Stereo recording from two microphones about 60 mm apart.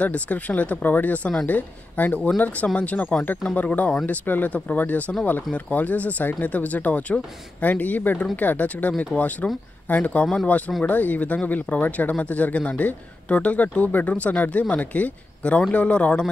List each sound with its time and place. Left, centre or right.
0.0 s speech: left